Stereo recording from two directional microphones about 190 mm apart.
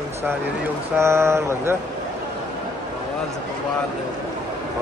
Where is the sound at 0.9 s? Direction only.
15° right (ahead or behind).